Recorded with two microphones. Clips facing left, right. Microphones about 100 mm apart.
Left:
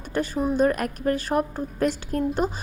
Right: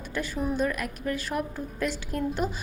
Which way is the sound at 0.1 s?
40° left (ahead or behind).